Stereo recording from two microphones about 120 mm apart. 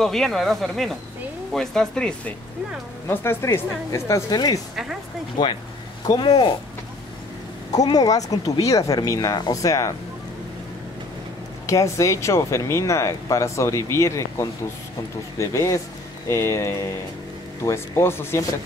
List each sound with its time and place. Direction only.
0.0 s speech: 5° left (ahead or behind)
3.1 s speech: 20° left (ahead or behind)
4.3 s speech: 35° left (ahead or behind)
7.7 s speech: 30° left (ahead or behind)
11.6 s speech: 25° left (ahead or behind)